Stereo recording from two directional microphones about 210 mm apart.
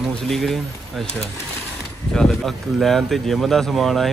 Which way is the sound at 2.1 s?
Centre (ahead or behind).